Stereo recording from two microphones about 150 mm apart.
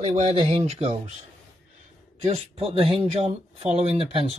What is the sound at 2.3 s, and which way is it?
Speech, 40° right (ahead or behind).